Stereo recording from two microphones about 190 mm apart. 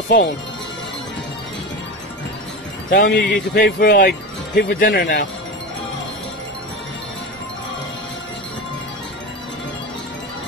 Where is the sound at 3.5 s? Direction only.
45° left (ahead or behind).